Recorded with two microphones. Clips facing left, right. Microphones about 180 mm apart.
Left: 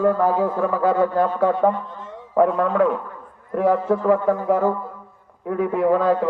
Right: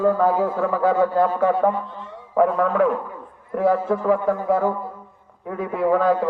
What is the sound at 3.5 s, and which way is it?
Speech, 15° left (ahead or behind).